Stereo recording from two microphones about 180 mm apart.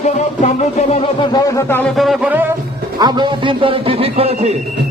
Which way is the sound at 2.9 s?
25° right (ahead or behind).